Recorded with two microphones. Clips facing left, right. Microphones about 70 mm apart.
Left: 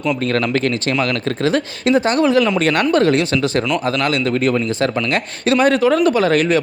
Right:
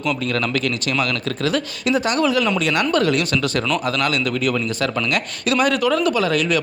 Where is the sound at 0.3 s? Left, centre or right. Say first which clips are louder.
Left 4 dB; left.